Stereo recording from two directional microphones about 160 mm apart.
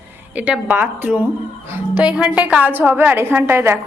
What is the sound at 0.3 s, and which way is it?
A woman's voice, 10° right (ahead or behind).